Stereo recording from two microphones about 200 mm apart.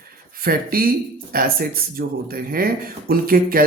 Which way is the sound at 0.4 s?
45° right (ahead or behind).